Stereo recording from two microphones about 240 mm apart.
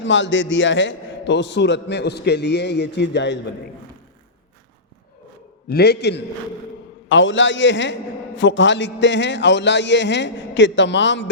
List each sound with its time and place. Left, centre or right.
0.0 s a man's voice: left
5.6 s a man's voice: left